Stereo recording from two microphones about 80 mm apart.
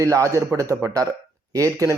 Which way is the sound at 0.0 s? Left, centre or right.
Right.